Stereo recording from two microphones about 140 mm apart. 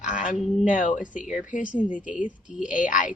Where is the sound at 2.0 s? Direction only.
10° right (ahead or behind).